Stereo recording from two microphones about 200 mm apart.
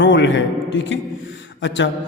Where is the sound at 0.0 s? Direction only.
65° left (ahead or behind).